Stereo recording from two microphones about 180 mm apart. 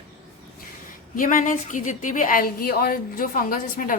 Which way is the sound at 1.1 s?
50° left (ahead or behind).